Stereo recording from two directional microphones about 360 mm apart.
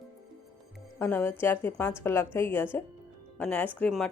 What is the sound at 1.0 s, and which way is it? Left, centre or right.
A woman's voice, centre.